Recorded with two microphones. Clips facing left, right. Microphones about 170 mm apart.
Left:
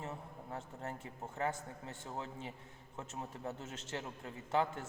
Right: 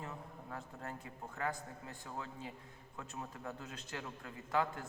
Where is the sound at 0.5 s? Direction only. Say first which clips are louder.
Left 2 dB; 25° left (ahead or behind).